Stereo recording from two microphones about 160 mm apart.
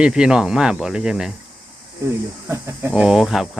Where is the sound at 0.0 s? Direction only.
5° right (ahead or behind).